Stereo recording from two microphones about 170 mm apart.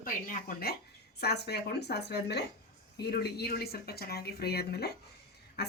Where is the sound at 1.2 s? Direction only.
75° left (ahead or behind).